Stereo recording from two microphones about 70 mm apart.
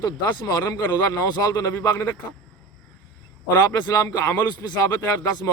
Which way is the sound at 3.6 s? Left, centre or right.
Left.